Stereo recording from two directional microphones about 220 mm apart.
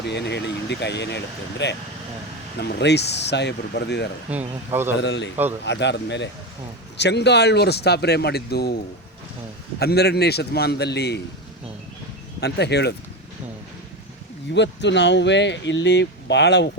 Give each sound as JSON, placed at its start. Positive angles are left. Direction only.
{"t": 0.1, "sound": "speech", "side_deg": 50}
{"t": 4.3, "sound": "speech", "side_deg": -10}
{"t": 4.9, "sound": "speech", "side_deg": 50}
{"t": 9.7, "sound": "speech", "side_deg": 45}
{"t": 12.4, "sound": "speech", "side_deg": 50}
{"t": 14.5, "sound": "speech", "side_deg": 55}